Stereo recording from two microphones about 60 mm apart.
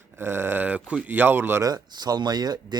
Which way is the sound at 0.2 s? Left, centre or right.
Right.